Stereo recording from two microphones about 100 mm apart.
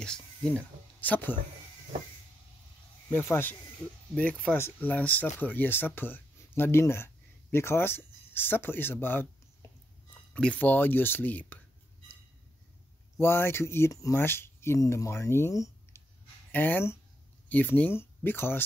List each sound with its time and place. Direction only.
0.0 s speech: 10° left (ahead or behind)
3.1 s speech: 20° left (ahead or behind)
13.2 s speech: 25° left (ahead or behind)
16.5 s speech: 20° left (ahead or behind)